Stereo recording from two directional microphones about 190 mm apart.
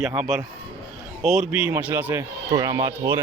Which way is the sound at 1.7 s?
10° right (ahead or behind).